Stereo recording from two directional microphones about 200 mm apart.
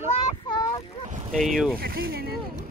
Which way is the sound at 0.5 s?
20° left (ahead or behind).